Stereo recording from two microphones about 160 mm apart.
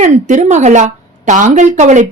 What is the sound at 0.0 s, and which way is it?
A woman's voice, 50° right (ahead or behind).